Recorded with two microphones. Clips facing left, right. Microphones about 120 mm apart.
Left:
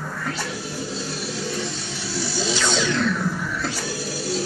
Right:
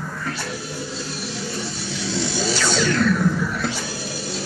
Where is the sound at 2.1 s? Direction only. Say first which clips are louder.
Right 3 dB; 20° right (ahead or behind).